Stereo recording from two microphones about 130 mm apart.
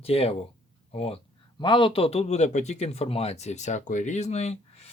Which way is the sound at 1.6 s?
40° left (ahead or behind).